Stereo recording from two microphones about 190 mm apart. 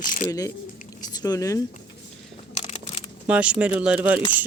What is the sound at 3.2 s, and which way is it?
Speech, 5° right (ahead or behind).